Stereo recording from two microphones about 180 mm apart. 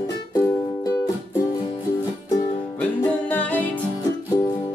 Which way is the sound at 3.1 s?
10° left (ahead or behind).